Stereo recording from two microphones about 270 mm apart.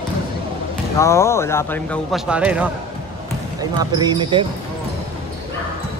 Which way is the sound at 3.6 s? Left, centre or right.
Centre.